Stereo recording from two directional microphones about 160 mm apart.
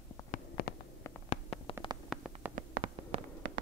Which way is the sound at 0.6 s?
70° left (ahead or behind).